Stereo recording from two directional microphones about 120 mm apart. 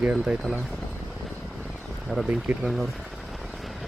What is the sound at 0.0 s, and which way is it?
Speech, 5° right (ahead or behind).